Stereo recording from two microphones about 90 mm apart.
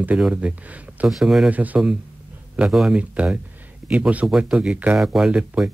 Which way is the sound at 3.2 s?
15° right (ahead or behind).